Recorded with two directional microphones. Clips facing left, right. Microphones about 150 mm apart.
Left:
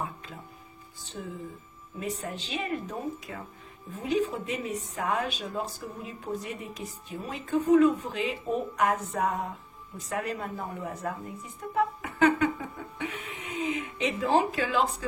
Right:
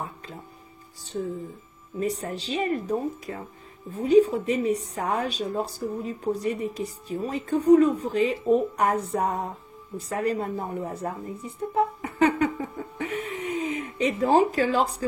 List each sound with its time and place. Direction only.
2.0 s a woman's voice: 35° right (ahead or behind)
11.7 s a sound: 30° right (ahead or behind)
12.9 s speech: 40° right (ahead or behind)